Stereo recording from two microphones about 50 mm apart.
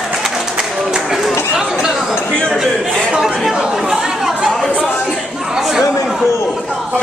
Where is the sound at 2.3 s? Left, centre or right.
Centre.